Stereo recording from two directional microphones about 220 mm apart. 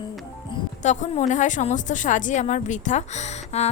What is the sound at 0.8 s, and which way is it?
A woman's voice, 35° left (ahead or behind).